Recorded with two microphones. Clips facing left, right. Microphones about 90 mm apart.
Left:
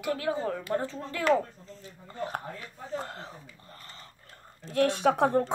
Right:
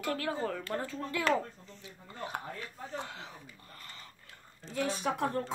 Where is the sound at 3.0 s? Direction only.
45° left (ahead or behind).